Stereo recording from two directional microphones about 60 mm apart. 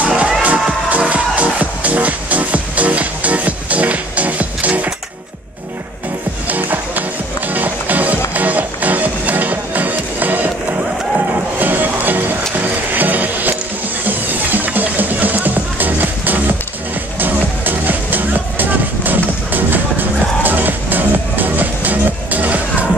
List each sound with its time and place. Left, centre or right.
0.0 s music: right
6.4 s music: right